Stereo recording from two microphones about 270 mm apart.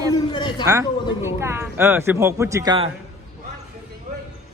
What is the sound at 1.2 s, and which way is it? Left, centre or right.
Speech, centre.